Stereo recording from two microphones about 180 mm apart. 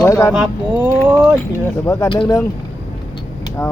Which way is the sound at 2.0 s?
30° left (ahead or behind).